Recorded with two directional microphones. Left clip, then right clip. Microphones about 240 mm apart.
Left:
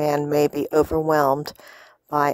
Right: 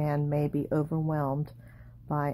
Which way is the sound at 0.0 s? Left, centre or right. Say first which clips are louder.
Left 11 dB; left.